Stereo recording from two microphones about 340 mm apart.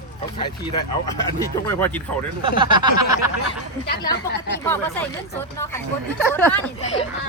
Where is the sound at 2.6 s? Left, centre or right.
Centre.